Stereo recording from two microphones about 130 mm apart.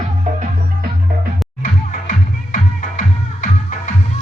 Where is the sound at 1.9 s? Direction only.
85° left.